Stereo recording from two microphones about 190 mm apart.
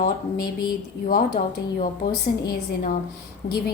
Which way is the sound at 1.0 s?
50° left (ahead or behind).